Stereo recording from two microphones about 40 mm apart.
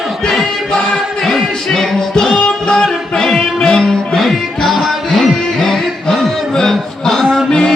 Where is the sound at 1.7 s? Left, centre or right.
Centre.